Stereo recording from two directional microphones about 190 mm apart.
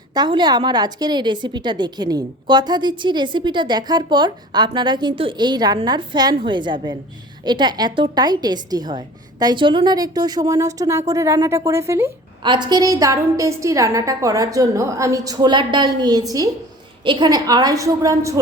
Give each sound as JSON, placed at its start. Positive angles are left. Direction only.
{"t": 0.1, "sound": "a woman's voice", "side_deg": -20}